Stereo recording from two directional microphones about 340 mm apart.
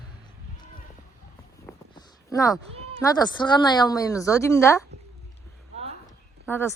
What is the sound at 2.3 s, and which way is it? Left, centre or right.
Speech, centre.